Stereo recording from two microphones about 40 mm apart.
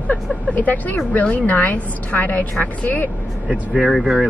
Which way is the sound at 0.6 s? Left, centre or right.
Left.